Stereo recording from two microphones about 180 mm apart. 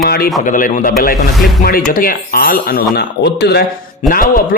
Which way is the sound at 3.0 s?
70° left (ahead or behind).